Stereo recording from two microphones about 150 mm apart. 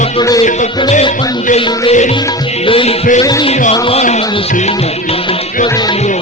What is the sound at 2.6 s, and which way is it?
Music, 40° left (ahead or behind).